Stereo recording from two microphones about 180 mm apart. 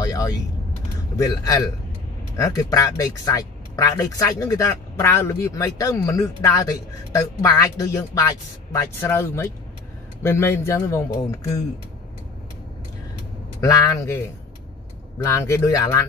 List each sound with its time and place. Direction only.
0.0 s vehicle: 20° left (ahead or behind)
1.1 s a man's voice: 20° left (ahead or behind)
13.6 s a man's voice: 20° left (ahead or behind)
15.2 s a man's voice: 15° left (ahead or behind)